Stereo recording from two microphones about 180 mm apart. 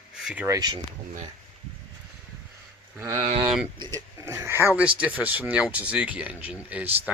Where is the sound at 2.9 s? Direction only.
15° right (ahead or behind).